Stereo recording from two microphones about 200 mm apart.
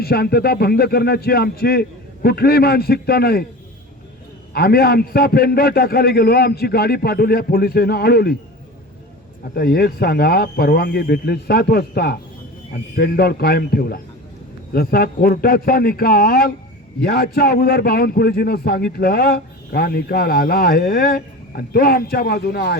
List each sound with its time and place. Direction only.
0.0 s a man's voice: 50° left (ahead or behind)
4.5 s a man's voice: 50° left (ahead or behind)
9.6 s a man's voice: 50° left (ahead or behind)